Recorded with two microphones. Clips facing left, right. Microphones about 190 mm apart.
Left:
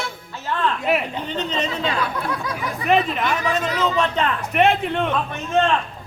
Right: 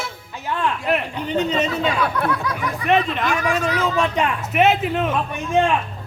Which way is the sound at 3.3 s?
10° right (ahead or behind).